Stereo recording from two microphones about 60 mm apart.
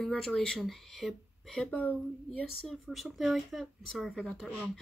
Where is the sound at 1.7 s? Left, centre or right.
Left.